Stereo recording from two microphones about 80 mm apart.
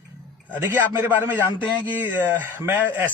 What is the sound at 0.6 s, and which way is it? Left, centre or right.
A man's voice, right.